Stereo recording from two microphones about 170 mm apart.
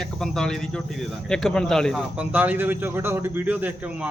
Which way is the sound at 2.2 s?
10° right (ahead or behind).